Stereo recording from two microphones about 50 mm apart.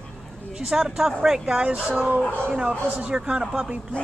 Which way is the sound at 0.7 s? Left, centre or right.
Centre.